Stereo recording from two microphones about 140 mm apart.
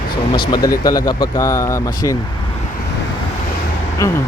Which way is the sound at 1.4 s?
20° left (ahead or behind).